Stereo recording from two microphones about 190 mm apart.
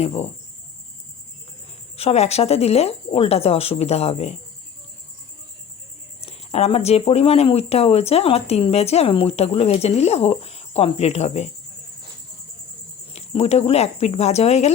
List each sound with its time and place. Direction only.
0.0 s speech: 35° left (ahead or behind)
2.0 s speech: 35° left (ahead or behind)
6.2 s speech: 35° left (ahead or behind)
13.1 s speech: 35° left (ahead or behind)